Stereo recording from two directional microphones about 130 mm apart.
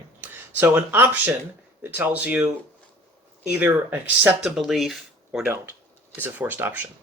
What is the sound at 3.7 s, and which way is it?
Speech, 15° right (ahead or behind).